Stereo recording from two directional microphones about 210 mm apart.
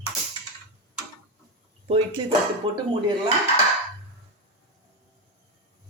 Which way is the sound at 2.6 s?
25° right (ahead or behind).